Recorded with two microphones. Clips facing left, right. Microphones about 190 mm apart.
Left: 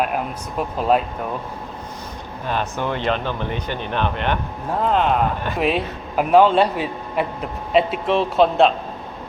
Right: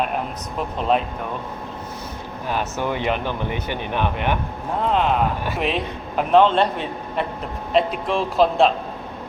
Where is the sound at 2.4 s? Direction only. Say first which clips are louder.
Left 1 dB; 10° right (ahead or behind).